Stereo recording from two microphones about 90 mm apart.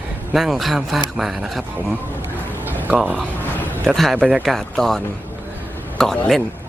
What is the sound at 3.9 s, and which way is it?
Speech, centre (ahead or behind).